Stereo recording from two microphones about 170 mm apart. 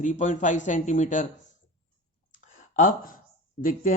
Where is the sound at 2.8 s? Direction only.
50° left (ahead or behind).